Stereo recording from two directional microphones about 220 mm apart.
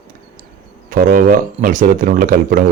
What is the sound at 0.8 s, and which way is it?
A man's voice, 40° right (ahead or behind).